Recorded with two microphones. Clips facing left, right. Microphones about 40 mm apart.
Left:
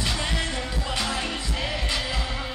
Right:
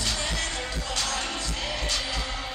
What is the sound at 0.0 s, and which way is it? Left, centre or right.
Music, left.